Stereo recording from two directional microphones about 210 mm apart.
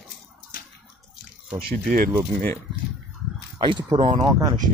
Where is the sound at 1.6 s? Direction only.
45° right (ahead or behind).